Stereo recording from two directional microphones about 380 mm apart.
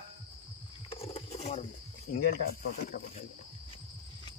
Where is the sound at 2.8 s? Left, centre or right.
Left.